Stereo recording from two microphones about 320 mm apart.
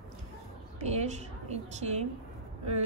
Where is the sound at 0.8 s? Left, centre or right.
Right.